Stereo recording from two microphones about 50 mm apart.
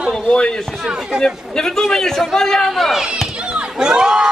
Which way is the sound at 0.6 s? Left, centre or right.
Centre.